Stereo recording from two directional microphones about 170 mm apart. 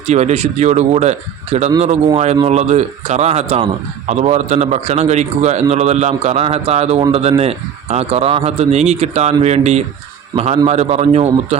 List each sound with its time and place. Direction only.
0.1 s a man's voice: 40° right (ahead or behind)
2.1 s a man's voice: 35° right (ahead or behind)